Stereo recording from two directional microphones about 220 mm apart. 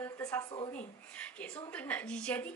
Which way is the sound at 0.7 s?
5° left (ahead or behind).